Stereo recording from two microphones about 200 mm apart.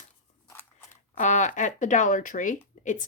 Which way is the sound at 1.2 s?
40° left (ahead or behind).